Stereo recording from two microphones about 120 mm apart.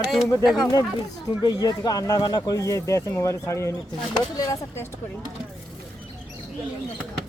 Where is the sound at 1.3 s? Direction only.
35° left (ahead or behind).